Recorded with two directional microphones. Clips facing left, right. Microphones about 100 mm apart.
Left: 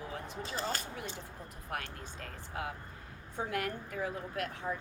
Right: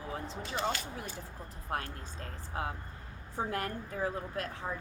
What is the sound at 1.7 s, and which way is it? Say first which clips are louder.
A woman's voice: right 3 dB; 30° right (ahead or behind).